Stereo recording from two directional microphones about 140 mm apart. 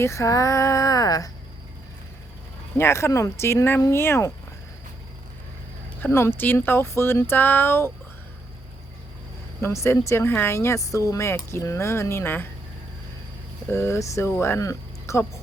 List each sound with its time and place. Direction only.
0.0 s speech: 20° left (ahead or behind)
2.7 s speech: 20° left (ahead or behind)
6.0 s speech: 15° left (ahead or behind)
9.6 s speech: 20° left (ahead or behind)
13.7 s speech: 20° left (ahead or behind)